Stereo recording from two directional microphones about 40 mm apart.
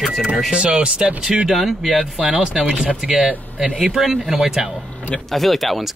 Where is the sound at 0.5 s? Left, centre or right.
Right.